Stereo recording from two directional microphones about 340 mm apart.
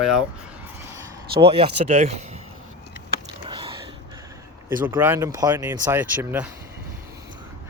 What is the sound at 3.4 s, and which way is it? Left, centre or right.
Biting, centre.